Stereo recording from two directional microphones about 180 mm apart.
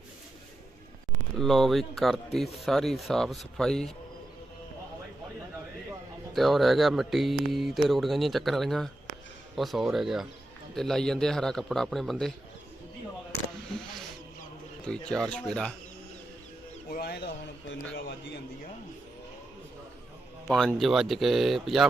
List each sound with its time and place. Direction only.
1.4 s speech: centre (ahead or behind)
6.3 s speech: centre (ahead or behind)
14.8 s speech: 5° left (ahead or behind)
16.9 s speech: 60° left (ahead or behind)
20.5 s speech: 5° left (ahead or behind)